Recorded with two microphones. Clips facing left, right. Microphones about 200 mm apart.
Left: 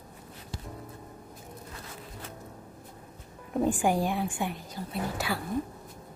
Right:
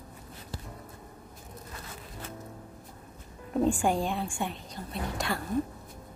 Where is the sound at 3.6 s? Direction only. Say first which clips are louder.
Left 1 dB; 15° left (ahead or behind).